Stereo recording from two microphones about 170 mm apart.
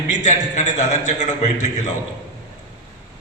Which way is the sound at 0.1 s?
45° left (ahead or behind).